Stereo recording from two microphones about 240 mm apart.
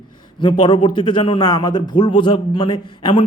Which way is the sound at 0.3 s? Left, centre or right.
Centre.